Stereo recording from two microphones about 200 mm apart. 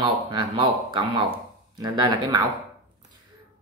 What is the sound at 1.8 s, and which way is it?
Speech, 20° right (ahead or behind).